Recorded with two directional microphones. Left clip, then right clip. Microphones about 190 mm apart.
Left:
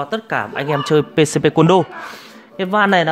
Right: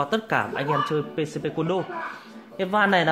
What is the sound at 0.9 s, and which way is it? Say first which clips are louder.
Speech: left 12 dB; 55° left (ahead or behind).